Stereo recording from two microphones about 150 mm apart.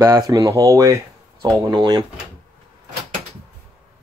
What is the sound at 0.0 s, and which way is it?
Speech, 25° right (ahead or behind).